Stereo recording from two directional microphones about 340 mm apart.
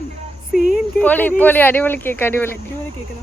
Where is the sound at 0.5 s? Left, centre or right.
Centre.